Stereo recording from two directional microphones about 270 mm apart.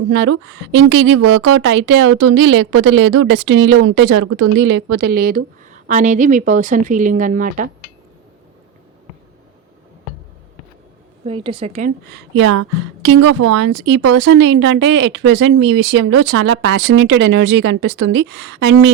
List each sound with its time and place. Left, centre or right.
0.1 s a woman's voice: right
11.3 s a woman's voice: centre
12.3 s a woman's voice: right